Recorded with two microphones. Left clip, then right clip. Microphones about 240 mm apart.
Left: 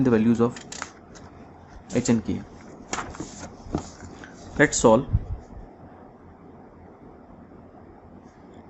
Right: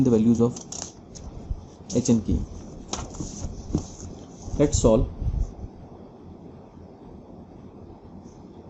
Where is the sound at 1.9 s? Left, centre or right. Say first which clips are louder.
Even; centre.